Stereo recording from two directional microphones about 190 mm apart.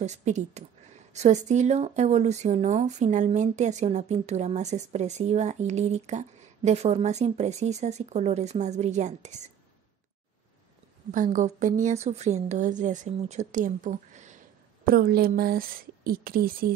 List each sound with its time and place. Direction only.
0.0 s speech: 35° right (ahead or behind)
11.1 s speech: 40° right (ahead or behind)
14.9 s a woman's voice: 50° right (ahead or behind)